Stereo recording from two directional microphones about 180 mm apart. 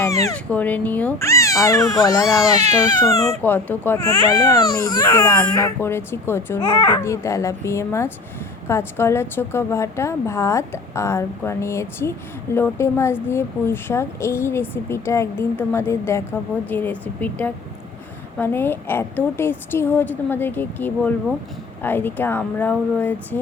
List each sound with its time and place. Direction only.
0.0 s speech: 15° left (ahead or behind)
3.4 s speech: 10° left (ahead or behind)